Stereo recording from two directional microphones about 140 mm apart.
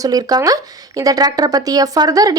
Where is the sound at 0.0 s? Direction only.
25° right (ahead or behind).